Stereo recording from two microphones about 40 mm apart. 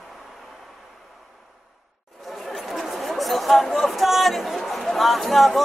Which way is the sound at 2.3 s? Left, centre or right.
Centre.